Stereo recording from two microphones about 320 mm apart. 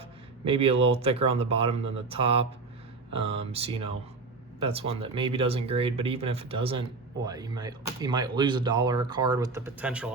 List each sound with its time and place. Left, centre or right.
0.4 s speech: centre